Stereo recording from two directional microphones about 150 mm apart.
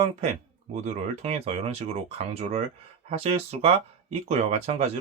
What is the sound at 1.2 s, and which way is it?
Speech, 45° right (ahead or behind).